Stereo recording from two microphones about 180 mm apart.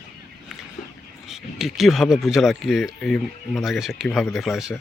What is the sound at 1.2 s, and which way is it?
Speech, centre (ahead or behind).